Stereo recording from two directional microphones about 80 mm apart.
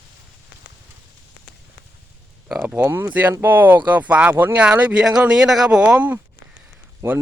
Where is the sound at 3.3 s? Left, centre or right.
Right.